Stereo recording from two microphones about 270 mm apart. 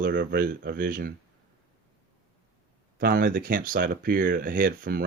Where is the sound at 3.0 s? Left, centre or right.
Right.